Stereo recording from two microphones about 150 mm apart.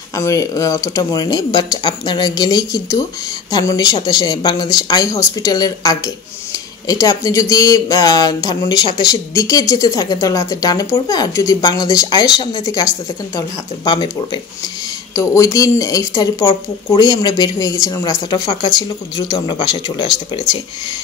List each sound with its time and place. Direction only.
0.1 s speech: 20° left (ahead or behind)